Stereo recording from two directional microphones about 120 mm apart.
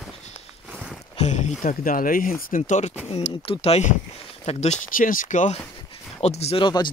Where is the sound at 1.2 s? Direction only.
85° left.